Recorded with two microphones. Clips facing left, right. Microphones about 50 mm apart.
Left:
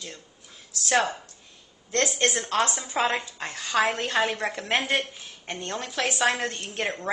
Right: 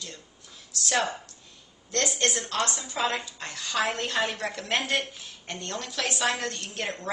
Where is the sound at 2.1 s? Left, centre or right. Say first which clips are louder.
Left 3 dB; left.